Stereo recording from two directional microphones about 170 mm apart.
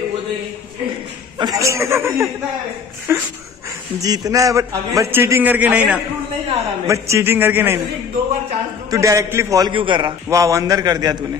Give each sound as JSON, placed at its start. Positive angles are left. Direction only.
{"t": 1.4, "sound": "a man's voice", "side_deg": -20}
{"t": 8.9, "sound": "a man's voice", "side_deg": -20}